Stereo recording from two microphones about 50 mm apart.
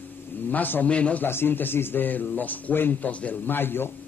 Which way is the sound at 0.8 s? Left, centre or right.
Left.